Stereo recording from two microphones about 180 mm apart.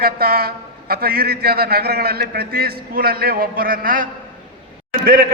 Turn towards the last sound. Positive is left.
turn(degrees=-55)  # may be behind; listen again after turning